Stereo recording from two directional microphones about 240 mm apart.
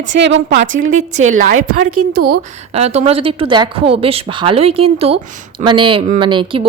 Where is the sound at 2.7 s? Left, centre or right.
Right.